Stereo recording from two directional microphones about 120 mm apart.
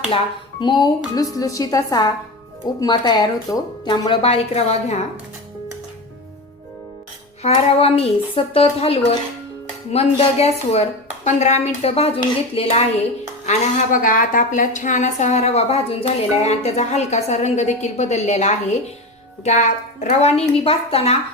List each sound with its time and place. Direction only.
0.6 s speech: 35° left (ahead or behind)
4.2 s a woman's voice: 60° left (ahead or behind)
7.4 s a woman's voice: 60° left (ahead or behind)
13.4 s a woman's voice: 75° left (ahead or behind); by 21.2 s 55° left (ahead or behind)